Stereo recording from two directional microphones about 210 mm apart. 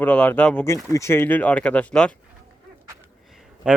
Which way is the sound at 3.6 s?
5° right (ahead or behind).